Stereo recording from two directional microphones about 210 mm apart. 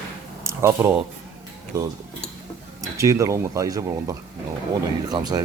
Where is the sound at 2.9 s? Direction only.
15° right (ahead or behind).